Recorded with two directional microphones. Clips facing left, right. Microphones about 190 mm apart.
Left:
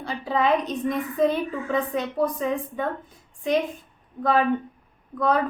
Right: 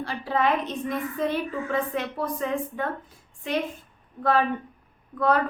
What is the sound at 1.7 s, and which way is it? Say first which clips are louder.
Speech: left 3 dB; 20° left (ahead or behind).